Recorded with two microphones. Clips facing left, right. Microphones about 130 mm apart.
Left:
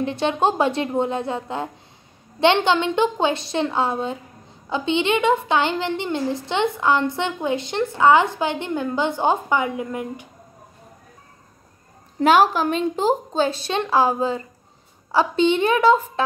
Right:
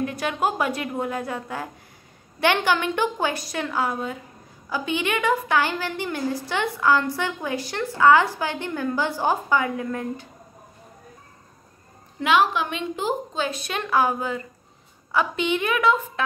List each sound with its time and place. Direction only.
0.0 s a woman's voice: 25° left (ahead or behind)
12.2 s a woman's voice: 40° left (ahead or behind)